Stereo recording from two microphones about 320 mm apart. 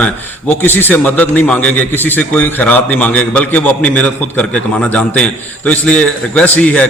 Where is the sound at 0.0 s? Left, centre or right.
Centre.